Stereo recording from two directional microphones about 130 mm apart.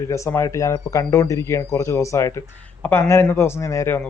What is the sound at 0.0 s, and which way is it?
A man's voice, 20° left (ahead or behind).